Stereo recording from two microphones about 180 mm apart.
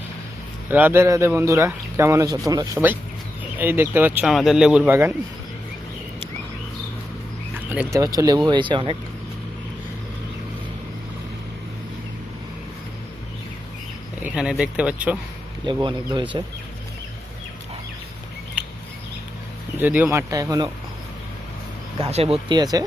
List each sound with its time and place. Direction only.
0.7 s speech: 10° right (ahead or behind)
7.5 s a sound: 10° right (ahead or behind)
7.9 s speech: 20° right (ahead or behind)
14.2 s speech: 5° right (ahead or behind)
15.6 s speech: 25° right (ahead or behind)
19.8 s speech: 10° right (ahead or behind)
21.9 s speech: 35° right (ahead or behind)